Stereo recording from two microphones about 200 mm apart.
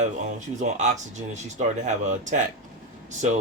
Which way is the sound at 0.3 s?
35° right (ahead or behind).